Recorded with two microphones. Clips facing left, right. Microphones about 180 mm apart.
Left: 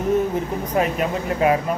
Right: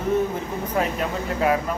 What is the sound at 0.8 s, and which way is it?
Speech, 20° left (ahead or behind).